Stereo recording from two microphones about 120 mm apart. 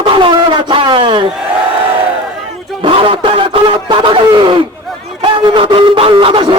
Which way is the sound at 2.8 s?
45° right (ahead or behind).